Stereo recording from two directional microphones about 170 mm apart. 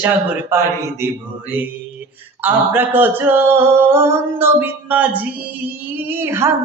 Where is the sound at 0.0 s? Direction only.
10° right (ahead or behind).